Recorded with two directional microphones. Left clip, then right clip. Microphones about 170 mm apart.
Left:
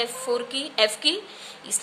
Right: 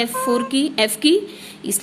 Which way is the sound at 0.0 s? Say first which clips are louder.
Right 6 dB; 35° right (ahead or behind).